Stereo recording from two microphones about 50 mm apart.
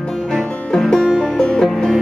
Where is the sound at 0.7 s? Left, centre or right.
Centre.